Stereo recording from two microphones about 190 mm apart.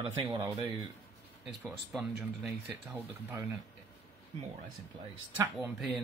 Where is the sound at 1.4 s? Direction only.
5° right (ahead or behind).